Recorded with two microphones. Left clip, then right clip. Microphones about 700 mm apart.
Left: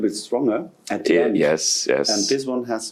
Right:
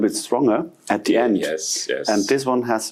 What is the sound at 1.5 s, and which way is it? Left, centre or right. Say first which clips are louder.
Speech: left 4 dB; left.